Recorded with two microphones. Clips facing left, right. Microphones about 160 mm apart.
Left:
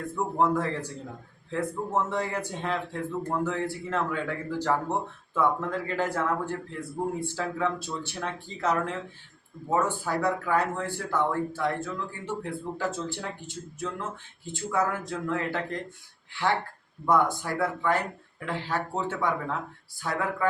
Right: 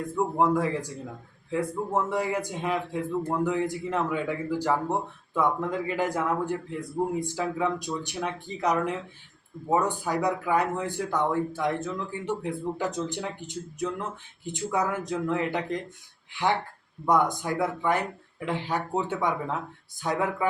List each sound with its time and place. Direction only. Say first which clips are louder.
0.3 s a man's voice: right 1 dB; 10° right (ahead or behind)